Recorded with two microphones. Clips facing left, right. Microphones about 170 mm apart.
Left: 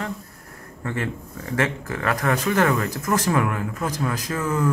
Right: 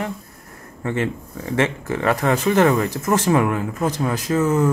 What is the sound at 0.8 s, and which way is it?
Speech, 20° right (ahead or behind).